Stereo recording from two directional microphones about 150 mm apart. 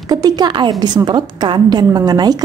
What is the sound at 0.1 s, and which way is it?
A woman's voice, 25° right (ahead or behind).